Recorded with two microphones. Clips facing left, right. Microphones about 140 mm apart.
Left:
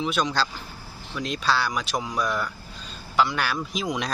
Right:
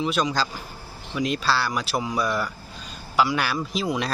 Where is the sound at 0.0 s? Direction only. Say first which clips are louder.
Right 1 dB; centre (ahead or behind).